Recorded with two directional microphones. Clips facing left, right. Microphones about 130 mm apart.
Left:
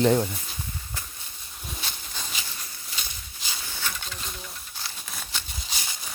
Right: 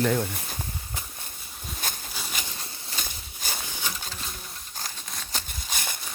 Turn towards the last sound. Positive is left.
turn(degrees=-55)  # may be behind; listen again after turning